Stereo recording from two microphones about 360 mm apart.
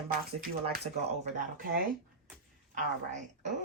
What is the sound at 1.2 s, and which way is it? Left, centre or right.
A woman's voice, centre.